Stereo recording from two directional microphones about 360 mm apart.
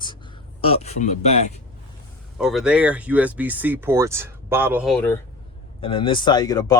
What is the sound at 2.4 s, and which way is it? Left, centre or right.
Speech, centre.